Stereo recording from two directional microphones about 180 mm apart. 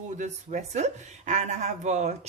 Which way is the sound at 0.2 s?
40° right (ahead or behind).